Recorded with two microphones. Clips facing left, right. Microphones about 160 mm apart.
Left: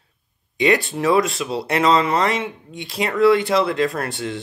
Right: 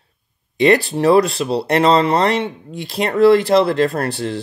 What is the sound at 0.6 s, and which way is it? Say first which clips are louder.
Speech: right 5 dB; 35° right (ahead or behind).